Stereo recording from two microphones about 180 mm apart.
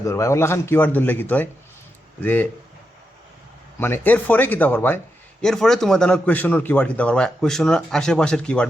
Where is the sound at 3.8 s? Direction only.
10° left (ahead or behind).